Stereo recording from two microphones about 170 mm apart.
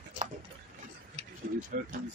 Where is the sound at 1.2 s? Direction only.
50° right (ahead or behind).